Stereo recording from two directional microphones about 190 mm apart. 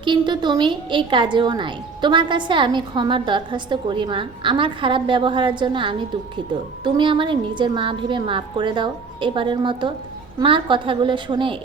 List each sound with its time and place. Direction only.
0.0 s a woman's voice: 25° right (ahead or behind)